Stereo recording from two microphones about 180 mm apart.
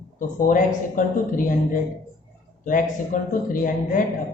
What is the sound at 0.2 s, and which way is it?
Speech, 45° left (ahead or behind).